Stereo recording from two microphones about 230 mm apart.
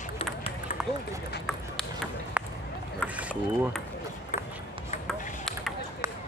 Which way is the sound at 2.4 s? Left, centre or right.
Centre.